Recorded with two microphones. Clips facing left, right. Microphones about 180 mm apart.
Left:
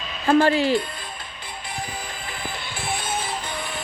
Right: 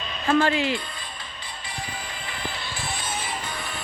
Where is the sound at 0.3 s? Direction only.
35° left (ahead or behind).